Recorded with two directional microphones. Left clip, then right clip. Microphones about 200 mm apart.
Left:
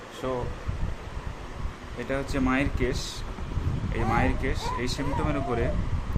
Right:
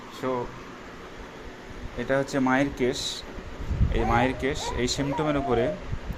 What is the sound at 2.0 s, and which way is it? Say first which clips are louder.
Speech: right 4 dB; 10° right (ahead or behind).